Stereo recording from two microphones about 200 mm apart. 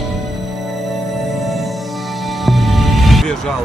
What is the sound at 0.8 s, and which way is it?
Music, centre (ahead or behind).